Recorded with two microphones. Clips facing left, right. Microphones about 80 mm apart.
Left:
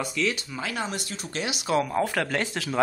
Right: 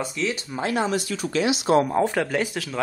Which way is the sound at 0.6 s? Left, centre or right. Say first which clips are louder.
Right 7 dB; right.